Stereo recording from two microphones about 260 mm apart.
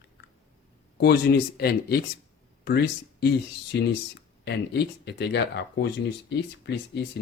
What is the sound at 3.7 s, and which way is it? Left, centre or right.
Speech, left.